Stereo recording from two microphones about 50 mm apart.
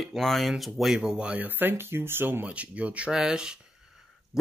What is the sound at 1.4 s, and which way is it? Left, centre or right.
Speech, right.